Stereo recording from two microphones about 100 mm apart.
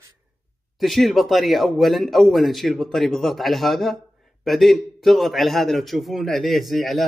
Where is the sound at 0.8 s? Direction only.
Centre (ahead or behind).